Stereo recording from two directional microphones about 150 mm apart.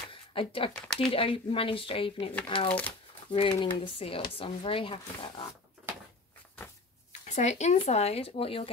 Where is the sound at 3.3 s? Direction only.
35° left (ahead or behind).